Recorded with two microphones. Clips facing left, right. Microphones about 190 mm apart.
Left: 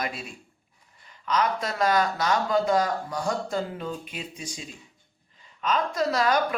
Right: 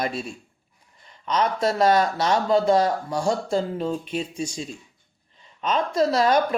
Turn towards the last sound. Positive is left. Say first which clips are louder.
# right 4 dB
turn(degrees=-30)  # may be behind; listen again after turning